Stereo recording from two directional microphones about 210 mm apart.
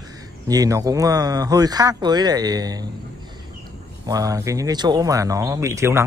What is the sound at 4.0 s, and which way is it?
Speech, 15° right (ahead or behind).